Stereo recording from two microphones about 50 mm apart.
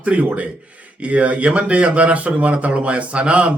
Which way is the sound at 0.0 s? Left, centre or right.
Right.